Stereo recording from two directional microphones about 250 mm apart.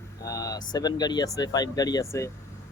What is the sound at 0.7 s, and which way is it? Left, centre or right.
Speech, centre.